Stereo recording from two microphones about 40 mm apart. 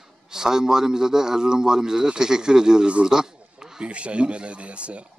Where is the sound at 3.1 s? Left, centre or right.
Centre.